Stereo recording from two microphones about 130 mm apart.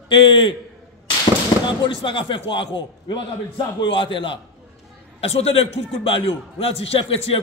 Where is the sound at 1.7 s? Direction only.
40° left (ahead or behind).